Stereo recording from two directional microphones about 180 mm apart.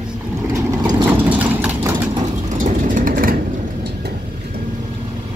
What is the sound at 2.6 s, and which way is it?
Vehicle, 50° right (ahead or behind).